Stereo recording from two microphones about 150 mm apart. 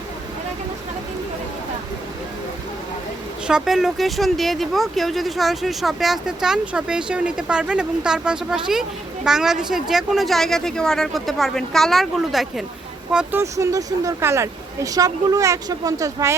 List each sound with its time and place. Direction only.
3.4 s speech: 5° right (ahead or behind)
13.4 s speech: 20° right (ahead or behind)